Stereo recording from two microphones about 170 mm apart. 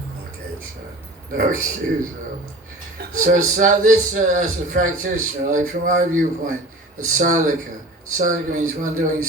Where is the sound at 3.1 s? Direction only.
50° right (ahead or behind).